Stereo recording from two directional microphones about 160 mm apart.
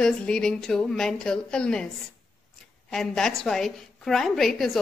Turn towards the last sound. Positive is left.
turn(degrees=0)  # may be behind; listen again after turning